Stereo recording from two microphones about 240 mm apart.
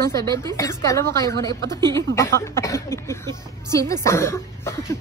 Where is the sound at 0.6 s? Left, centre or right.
Centre.